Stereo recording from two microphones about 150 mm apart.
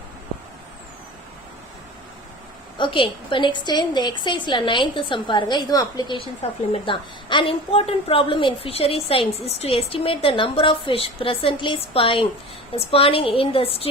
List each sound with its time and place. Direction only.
2.7 s a woman's voice: 35° left (ahead or behind)